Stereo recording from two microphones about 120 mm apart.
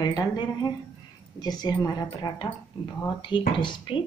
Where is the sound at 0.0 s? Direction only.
35° left (ahead or behind).